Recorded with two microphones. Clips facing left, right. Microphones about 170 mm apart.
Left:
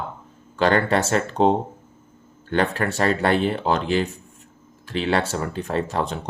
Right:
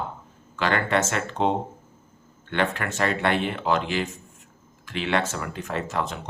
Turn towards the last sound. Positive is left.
turn(degrees=35)  # may be behind; listen again after turning